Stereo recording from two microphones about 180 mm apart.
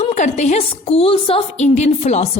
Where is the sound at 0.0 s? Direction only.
40° left (ahead or behind).